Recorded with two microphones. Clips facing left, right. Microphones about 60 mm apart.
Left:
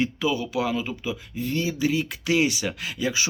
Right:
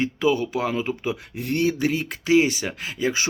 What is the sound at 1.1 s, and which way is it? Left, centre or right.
Speech, right.